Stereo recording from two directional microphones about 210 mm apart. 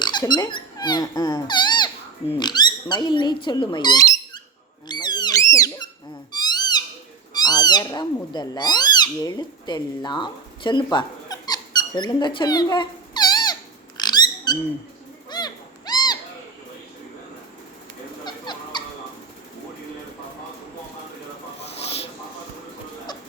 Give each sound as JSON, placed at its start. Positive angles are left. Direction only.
{"t": 0.0, "sound": "speech", "side_deg": 20}
{"t": 4.9, "sound": "squeak", "side_deg": 20}
{"t": 6.3, "sound": "cat", "side_deg": 20}
{"t": 15.3, "sound": "owl", "side_deg": 20}
{"t": 18.3, "sound": "fowl", "side_deg": 20}